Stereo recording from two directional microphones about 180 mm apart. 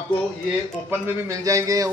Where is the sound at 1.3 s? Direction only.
20° right (ahead or behind).